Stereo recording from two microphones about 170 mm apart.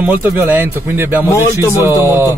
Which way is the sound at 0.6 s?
15° right (ahead or behind).